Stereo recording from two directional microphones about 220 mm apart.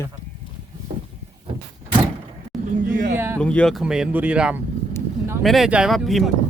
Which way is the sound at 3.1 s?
10° right (ahead or behind).